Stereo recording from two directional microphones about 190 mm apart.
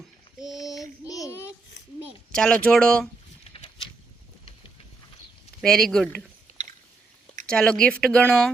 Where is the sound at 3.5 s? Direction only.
30° left (ahead or behind).